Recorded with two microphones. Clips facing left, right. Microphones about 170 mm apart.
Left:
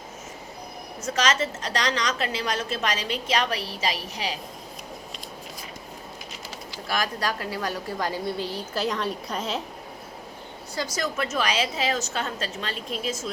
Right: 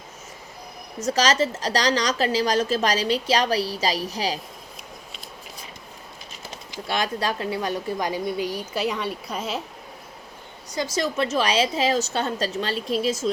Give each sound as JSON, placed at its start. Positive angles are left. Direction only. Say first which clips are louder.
{"t": 1.0, "sound": "a woman's voice", "louder": "right 4 dB", "side_deg": -35}
{"t": 6.7, "sound": "speech", "louder": "right 3 dB", "side_deg": -25}
{"t": 10.8, "sound": "a woman's voice", "louder": "right 4 dB", "side_deg": -25}